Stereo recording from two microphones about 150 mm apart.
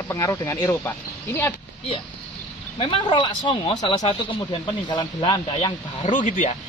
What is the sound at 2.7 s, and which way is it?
A woman's voice, 35° left (ahead or behind).